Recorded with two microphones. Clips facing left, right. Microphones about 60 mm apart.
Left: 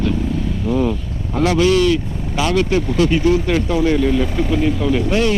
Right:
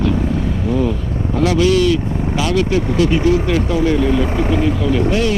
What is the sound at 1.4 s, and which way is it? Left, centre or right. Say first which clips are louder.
Speech: even; left.